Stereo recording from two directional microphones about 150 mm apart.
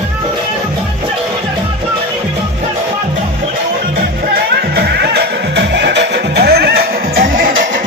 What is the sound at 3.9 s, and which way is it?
Music, 85° right.